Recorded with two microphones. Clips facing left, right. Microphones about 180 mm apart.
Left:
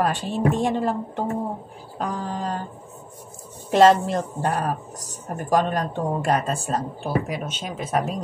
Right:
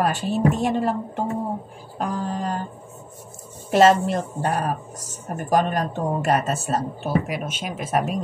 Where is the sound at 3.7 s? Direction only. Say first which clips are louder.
Even; 10° right (ahead or behind).